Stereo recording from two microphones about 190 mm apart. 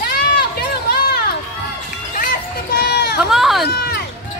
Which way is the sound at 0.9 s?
55° left (ahead or behind).